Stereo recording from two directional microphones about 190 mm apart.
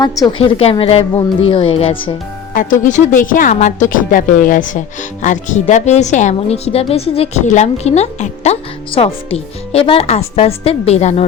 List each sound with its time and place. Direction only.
0.0 s a woman's voice: 25° left (ahead or behind)
2.8 s a woman's voice: 40° left (ahead or behind)